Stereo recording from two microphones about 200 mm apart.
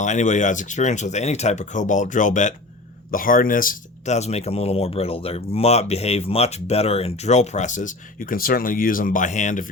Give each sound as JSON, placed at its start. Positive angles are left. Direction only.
{"t": 0.0, "sound": "speech", "side_deg": 35}